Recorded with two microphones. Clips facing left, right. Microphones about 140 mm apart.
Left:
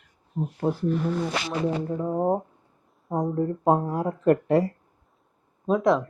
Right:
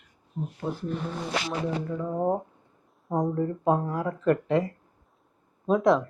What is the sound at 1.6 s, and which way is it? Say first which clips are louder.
Speech: left 4 dB; 30° left (ahead or behind).